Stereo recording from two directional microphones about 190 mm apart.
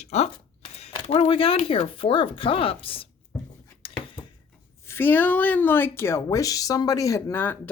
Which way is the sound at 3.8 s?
30° left (ahead or behind).